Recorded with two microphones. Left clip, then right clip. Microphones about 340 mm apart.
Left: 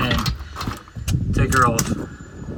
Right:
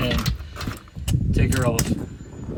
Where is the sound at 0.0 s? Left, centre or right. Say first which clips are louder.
Left 3 dB; centre.